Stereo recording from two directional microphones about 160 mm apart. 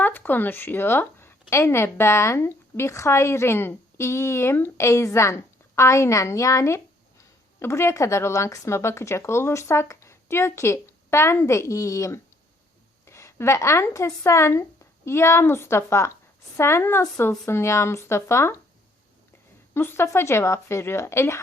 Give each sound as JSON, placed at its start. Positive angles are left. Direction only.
{"t": 0.0, "sound": "speech", "side_deg": 10}
{"t": 19.7, "sound": "speech", "side_deg": 15}